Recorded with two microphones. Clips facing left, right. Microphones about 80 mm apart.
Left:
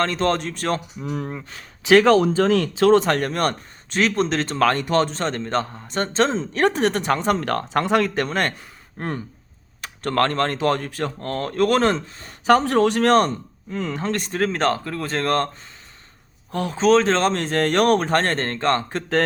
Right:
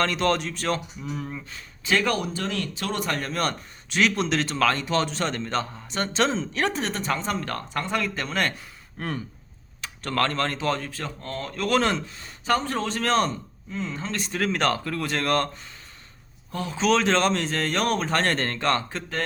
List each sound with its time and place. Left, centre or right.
0.0 s speech: left
1.5 s speech: left
12.5 s speech: left
16.5 s speech: left
16.7 s speech: left